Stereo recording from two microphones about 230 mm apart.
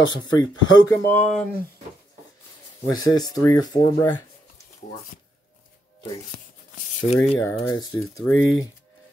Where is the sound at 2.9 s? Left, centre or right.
Centre.